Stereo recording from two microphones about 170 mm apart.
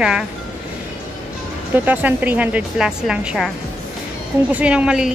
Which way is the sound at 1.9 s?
10° right (ahead or behind).